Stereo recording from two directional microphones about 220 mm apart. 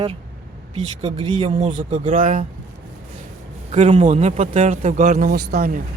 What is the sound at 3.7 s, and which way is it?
A man's voice, 30° right (ahead or behind).